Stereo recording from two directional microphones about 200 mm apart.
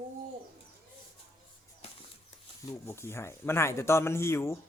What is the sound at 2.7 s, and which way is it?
Speech, 15° left (ahead or behind).